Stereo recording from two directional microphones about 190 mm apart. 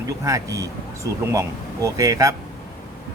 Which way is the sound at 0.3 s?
15° right (ahead or behind).